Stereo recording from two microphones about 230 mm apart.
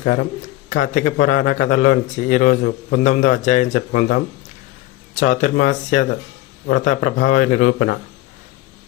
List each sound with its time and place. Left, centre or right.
0.0 s a man's voice: left